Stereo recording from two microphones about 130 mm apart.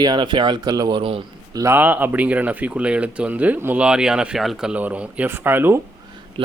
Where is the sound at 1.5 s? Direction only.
25° right (ahead or behind).